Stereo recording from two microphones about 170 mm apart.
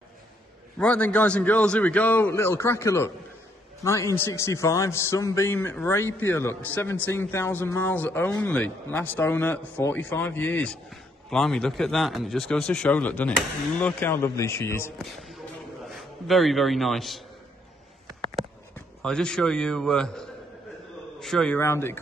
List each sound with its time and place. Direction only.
0.7 s speech: 5° left (ahead or behind)
15.0 s a sound: centre (ahead or behind)
15.9 s a man's voice: centre (ahead or behind)
19.0 s a man's voice: 5° left (ahead or behind)
21.5 s speech: 15° left (ahead or behind)